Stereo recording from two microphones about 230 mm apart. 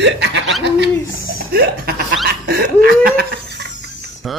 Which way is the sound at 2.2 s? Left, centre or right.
Right.